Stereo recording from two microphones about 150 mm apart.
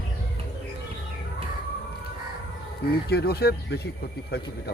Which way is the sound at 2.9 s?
90° left.